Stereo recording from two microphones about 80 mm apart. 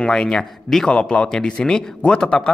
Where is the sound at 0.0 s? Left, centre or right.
Centre.